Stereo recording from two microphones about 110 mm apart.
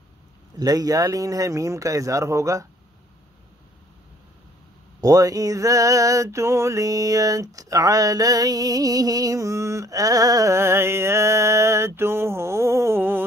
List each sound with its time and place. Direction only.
0.6 s speech: 35° right (ahead or behind)
5.0 s mantra: 35° right (ahead or behind)